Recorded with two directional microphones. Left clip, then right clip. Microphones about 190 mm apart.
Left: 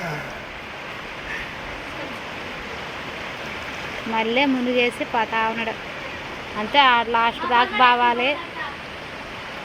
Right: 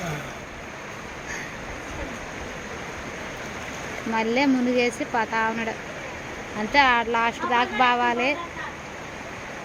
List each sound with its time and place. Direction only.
4.1 s speech: 10° right (ahead or behind)
6.7 s speech: 10° right (ahead or behind)